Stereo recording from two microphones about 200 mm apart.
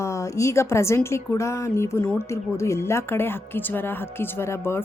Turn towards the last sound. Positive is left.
turn(degrees=10)  # may be behind; listen again after turning